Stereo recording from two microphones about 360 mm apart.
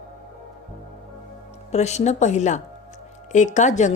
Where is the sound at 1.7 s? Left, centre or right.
Centre.